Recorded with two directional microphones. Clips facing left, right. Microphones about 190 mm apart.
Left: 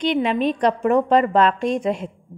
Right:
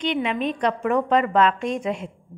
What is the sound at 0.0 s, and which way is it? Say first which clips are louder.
A woman's voice: left 4 dB; 35° left (ahead or behind).